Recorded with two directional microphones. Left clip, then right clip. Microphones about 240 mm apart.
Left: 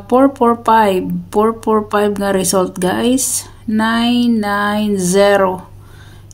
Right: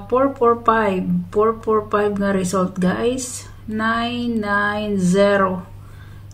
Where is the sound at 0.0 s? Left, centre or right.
Left.